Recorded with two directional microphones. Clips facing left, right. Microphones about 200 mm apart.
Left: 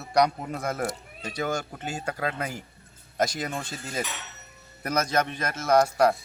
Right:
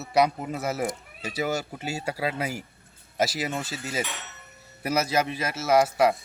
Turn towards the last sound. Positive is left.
turn(degrees=0)  # may be behind; listen again after turning